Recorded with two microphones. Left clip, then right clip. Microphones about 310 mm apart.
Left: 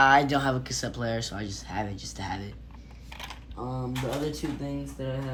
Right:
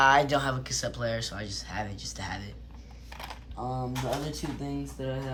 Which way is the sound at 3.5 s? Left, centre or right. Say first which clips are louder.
Right 1 dB; centre.